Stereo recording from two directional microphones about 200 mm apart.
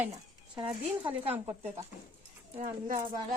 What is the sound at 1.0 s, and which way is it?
Speech, 25° right (ahead or behind).